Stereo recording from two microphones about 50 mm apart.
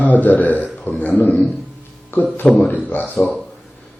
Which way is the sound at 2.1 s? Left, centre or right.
Left.